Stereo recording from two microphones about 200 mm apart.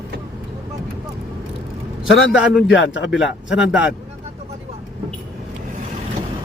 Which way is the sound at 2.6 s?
65° left (ahead or behind).